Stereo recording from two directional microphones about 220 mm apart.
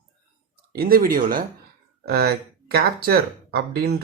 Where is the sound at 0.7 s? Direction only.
45° right (ahead or behind).